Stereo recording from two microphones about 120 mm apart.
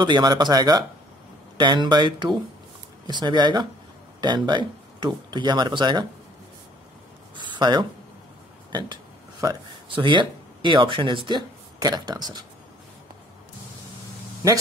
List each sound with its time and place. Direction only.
0.0 s speech: 35° right (ahead or behind)
7.3 s a sound: 40° right (ahead or behind)
9.4 s speech: 30° right (ahead or behind)
9.8 s speech: 45° right (ahead or behind)